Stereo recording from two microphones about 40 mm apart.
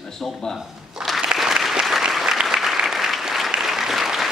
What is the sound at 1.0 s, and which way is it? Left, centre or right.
Applause, centre.